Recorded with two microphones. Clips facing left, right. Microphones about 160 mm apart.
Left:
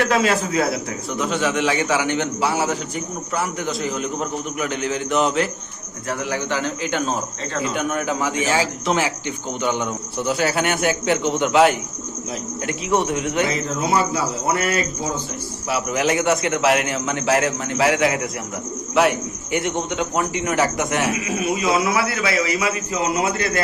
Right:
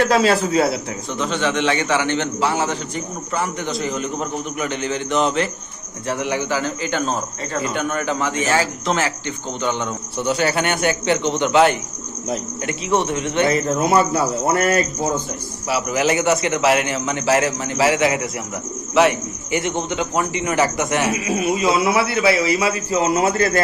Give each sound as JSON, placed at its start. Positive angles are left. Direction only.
{"t": 0.1, "sound": "speech", "side_deg": -30}
{"t": 1.2, "sound": "a man's voice", "side_deg": 5}
{"t": 6.1, "sound": "a man's voice", "side_deg": -25}
{"t": 6.5, "sound": "a man's voice", "side_deg": 0}
{"t": 10.2, "sound": "a man's voice", "side_deg": 0}
{"t": 14.0, "sound": "speech", "side_deg": -55}
{"t": 15.7, "sound": "a man's voice", "side_deg": 0}
{"t": 21.2, "sound": "a man's voice", "side_deg": -30}